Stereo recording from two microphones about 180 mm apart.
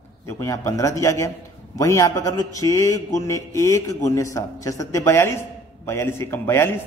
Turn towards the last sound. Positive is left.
turn(degrees=15)  # may be behind; listen again after turning